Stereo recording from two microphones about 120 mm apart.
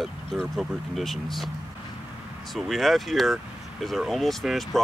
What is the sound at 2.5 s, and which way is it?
Speech, centre (ahead or behind).